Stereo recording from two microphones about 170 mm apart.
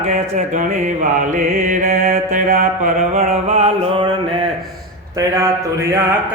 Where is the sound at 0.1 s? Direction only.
45° right (ahead or behind).